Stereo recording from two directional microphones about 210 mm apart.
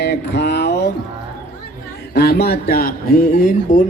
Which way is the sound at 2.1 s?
50° left (ahead or behind).